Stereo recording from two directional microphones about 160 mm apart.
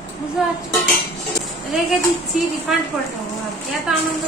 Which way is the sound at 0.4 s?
5° right (ahead or behind).